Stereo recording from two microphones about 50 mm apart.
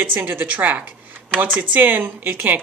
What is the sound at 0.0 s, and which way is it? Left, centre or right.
A woman's voice, right.